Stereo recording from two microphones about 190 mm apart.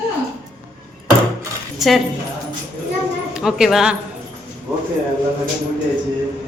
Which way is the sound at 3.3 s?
5° right (ahead or behind).